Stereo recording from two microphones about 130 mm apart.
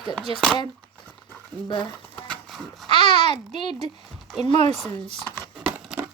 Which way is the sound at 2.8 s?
40° left (ahead or behind).